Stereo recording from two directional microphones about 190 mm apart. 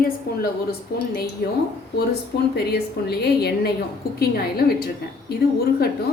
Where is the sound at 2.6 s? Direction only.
60° left (ahead or behind).